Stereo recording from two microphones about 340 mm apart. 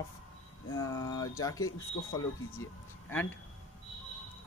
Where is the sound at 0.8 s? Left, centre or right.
Centre.